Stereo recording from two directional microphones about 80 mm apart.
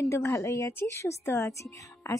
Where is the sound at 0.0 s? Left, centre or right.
Left.